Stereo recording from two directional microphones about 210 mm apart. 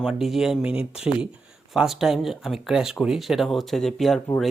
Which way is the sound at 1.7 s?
Centre (ahead or behind).